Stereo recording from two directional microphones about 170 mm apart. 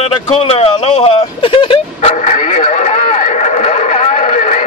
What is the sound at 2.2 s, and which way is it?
Radio, 45° left (ahead or behind).